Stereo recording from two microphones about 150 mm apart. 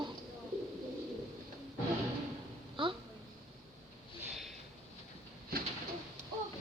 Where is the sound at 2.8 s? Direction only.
30° right (ahead or behind).